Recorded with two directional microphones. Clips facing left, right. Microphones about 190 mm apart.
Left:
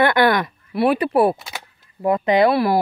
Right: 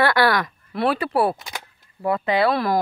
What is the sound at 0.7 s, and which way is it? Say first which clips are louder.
Speech: left 4 dB; 15° left (ahead or behind).